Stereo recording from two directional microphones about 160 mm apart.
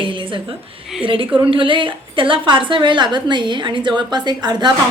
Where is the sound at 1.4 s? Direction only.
30° right (ahead or behind).